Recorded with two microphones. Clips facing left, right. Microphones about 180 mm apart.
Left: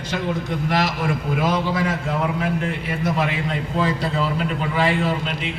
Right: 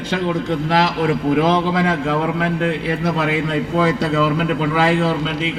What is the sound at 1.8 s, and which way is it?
A man's voice, 80° right.